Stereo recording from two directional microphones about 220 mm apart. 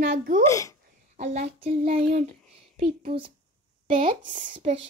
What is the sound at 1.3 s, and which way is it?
Child singing, 25° right (ahead or behind).